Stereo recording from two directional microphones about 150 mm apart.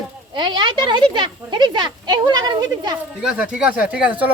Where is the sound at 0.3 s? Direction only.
30° right (ahead or behind).